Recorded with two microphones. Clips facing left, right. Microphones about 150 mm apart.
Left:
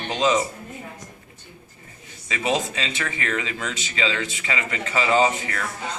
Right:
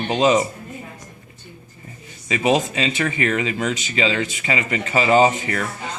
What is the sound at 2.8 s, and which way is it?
Speech, 50° right (ahead or behind).